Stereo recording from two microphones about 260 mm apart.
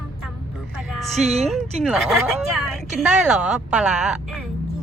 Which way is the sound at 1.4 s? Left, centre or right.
Centre.